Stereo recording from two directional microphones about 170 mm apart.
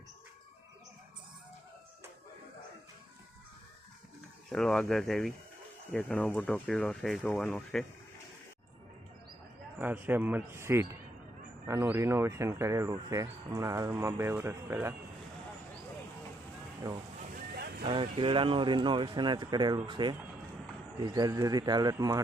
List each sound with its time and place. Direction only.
4.5 s speech: 5° left (ahead or behind)
9.7 s speech: 10° right (ahead or behind)
17.3 s boat: 65° right (ahead or behind)
17.8 s speech: 30° right (ahead or behind)